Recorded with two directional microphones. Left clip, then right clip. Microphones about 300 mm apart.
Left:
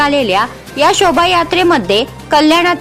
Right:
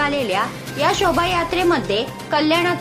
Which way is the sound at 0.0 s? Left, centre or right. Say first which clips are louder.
Left 8 dB; left.